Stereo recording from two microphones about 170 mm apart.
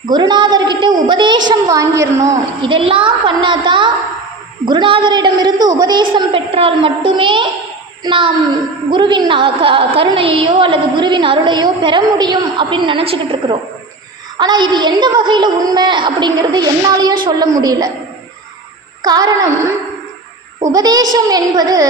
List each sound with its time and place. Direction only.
0.0 s a woman's voice: 25° right (ahead or behind)
2.6 s a woman's voice: 30° right (ahead or behind)
19.0 s a woman's voice: 20° right (ahead or behind)